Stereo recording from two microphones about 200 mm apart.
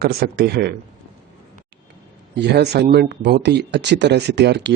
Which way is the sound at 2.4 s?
55° right (ahead or behind).